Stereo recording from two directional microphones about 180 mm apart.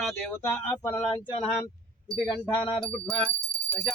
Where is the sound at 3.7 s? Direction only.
5° left (ahead or behind).